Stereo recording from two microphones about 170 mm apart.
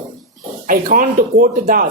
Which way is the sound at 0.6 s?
55° right (ahead or behind).